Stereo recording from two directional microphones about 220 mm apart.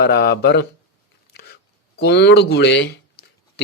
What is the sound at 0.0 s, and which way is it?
Speech, 45° left (ahead or behind).